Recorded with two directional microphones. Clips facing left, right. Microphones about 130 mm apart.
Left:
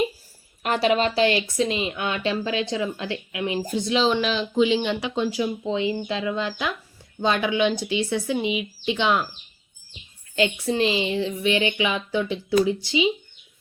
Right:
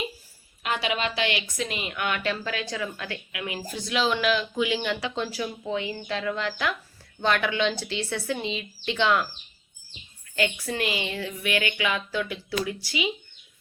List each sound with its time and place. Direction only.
0.6 s a woman's voice: 45° left (ahead or behind); by 9.2 s 20° left (ahead or behind)
10.3 s a woman's voice: 25° left (ahead or behind)